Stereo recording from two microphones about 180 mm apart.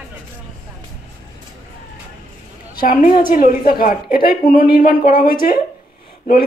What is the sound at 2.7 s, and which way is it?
A woman's voice, 50° left (ahead or behind).